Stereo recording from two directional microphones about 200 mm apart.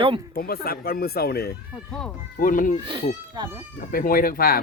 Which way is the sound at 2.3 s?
40° left (ahead or behind).